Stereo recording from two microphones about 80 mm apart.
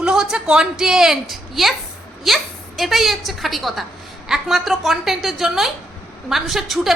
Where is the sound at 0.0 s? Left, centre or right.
Centre.